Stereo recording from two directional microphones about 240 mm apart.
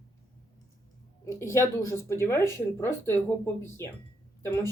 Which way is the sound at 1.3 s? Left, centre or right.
Centre.